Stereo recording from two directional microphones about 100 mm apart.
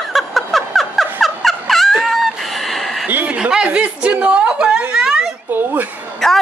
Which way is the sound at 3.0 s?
15° right (ahead or behind).